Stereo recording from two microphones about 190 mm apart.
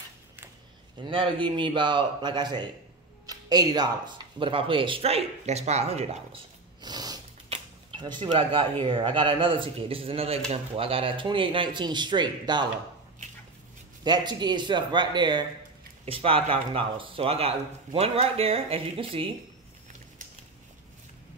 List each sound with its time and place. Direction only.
1.0 s speech: 25° right (ahead or behind)
3.3 s a sound: 20° right (ahead or behind)
4.4 s speech: 25° right (ahead or behind)
6.8 s snort: 20° right (ahead or behind)
7.4 s speech: 25° right (ahead or behind)
14.0 s speech: 20° right (ahead or behind)